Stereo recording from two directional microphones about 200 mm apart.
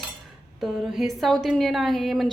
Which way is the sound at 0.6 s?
Centre (ahead or behind).